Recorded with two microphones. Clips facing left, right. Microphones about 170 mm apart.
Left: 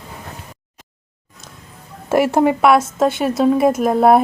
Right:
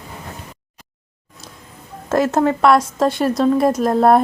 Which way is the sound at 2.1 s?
10° left (ahead or behind).